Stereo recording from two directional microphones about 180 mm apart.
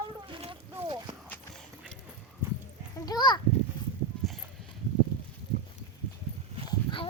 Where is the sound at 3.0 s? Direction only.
25° left (ahead or behind).